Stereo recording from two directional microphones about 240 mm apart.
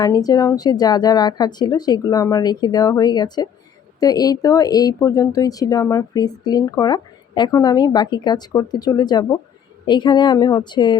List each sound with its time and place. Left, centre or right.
0.0 s speech: centre